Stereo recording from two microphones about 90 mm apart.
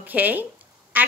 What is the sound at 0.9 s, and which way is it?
Quack, 20° right (ahead or behind).